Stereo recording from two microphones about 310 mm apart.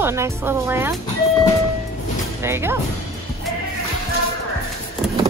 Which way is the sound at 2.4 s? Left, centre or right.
Centre.